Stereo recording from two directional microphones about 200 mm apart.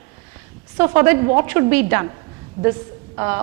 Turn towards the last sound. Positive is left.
turn(degrees=-15)  # may be behind; listen again after turning